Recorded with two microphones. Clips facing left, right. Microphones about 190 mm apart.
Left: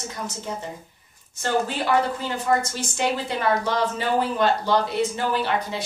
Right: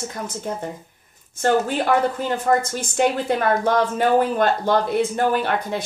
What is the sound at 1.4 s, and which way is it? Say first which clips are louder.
A woman's voice: right 5 dB; 50° right (ahead or behind).